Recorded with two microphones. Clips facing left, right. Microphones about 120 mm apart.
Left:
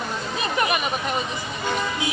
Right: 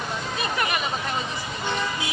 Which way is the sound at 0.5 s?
20° left (ahead or behind).